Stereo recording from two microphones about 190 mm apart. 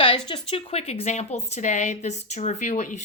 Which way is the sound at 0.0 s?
25° left (ahead or behind).